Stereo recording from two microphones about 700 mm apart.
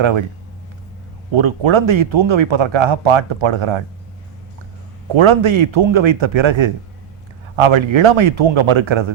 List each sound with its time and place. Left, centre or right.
0.0 s a man's voice: right
1.3 s a man's voice: right
5.1 s a man's voice: right